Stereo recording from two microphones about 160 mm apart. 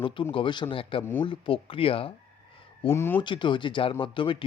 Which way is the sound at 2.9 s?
15° left (ahead or behind).